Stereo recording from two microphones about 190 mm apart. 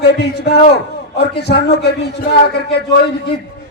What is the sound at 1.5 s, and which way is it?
Speech, 60° left (ahead or behind).